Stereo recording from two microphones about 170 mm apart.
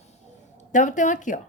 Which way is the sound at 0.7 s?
50° left (ahead or behind).